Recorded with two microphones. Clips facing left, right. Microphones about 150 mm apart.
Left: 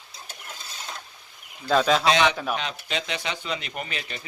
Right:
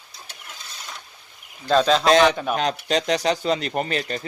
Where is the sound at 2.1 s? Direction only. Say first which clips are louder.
Right 5 dB; 45° right (ahead or behind).